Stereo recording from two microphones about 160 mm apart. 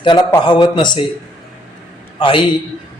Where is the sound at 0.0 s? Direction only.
30° left (ahead or behind).